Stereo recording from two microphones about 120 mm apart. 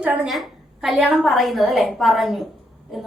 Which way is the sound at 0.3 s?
Centre (ahead or behind).